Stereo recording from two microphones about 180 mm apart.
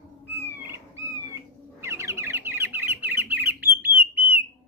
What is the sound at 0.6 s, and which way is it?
Bird, 15° right (ahead or behind).